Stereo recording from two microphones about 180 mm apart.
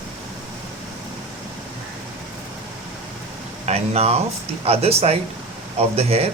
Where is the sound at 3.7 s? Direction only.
35° right (ahead or behind).